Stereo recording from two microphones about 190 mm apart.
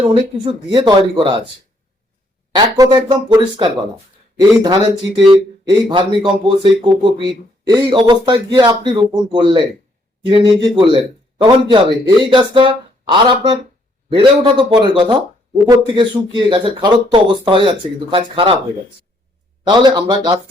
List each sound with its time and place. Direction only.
0.1 s speech: 25° right (ahead or behind)
2.6 s speech: 20° right (ahead or behind)
19.6 s a man's voice: 25° right (ahead or behind)